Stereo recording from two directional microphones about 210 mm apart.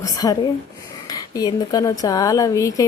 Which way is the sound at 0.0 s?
15° left (ahead or behind).